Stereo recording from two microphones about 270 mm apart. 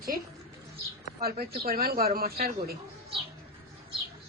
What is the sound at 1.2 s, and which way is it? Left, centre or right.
Speech, right.